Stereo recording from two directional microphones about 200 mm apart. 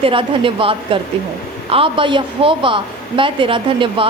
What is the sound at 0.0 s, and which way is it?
A woman's voice, 25° right (ahead or behind).